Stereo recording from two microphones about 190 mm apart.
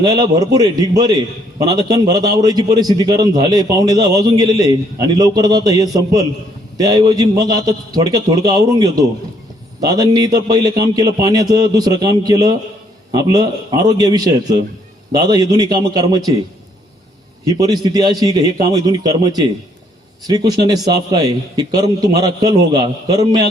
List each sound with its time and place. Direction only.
0.0 s a man's voice: 20° right (ahead or behind)
17.4 s a man's voice: 20° right (ahead or behind)